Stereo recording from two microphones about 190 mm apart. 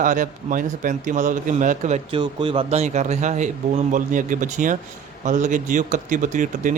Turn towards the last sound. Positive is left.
turn(degrees=-40)  # may be behind; listen again after turning